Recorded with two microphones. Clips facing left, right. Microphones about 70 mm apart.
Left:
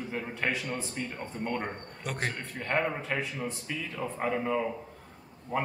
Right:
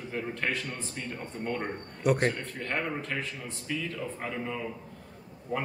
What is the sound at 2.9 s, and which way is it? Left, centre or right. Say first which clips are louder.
A man's voice: left 1 dB; centre.